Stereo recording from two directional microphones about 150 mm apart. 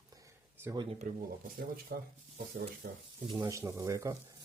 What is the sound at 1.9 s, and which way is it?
Speech, 90° right.